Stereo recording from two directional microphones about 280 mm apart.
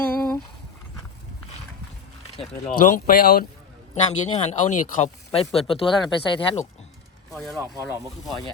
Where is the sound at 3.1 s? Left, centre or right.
Left.